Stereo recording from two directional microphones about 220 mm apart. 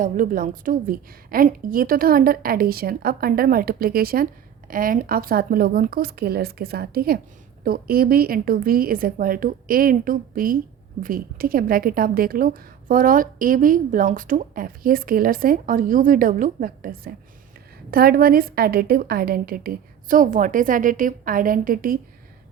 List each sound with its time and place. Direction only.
0.0 s a woman's voice: 40° right (ahead or behind)